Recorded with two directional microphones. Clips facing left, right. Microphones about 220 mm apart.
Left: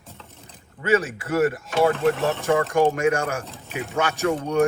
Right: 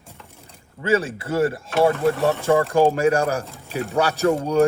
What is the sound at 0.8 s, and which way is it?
A man's voice, 30° right (ahead or behind).